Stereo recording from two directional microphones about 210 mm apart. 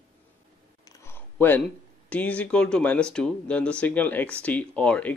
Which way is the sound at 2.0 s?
5° left (ahead or behind).